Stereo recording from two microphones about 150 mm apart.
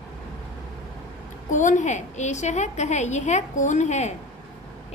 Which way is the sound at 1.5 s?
55° left (ahead or behind).